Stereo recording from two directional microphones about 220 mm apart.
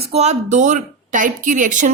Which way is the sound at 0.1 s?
30° right (ahead or behind).